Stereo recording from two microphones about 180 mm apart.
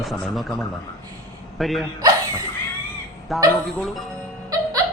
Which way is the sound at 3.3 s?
Centre (ahead or behind).